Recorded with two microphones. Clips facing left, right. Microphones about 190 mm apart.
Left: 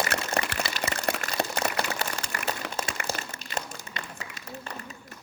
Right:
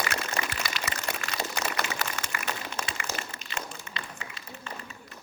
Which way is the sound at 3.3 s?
40° left (ahead or behind).